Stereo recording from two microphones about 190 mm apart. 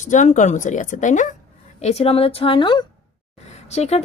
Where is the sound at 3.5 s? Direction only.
35° left (ahead or behind).